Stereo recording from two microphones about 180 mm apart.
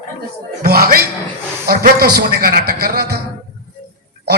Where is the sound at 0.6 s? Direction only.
55° right (ahead or behind).